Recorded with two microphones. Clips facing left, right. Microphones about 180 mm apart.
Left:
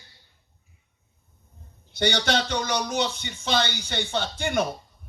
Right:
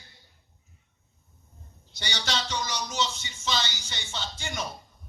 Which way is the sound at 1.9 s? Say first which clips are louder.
Left 9 dB; 60° left (ahead or behind).